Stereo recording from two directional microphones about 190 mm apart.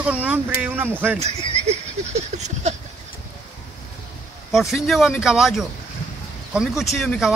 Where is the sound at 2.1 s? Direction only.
35° right (ahead or behind).